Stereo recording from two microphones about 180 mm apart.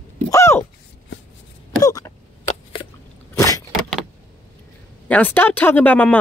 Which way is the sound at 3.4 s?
20° left (ahead or behind).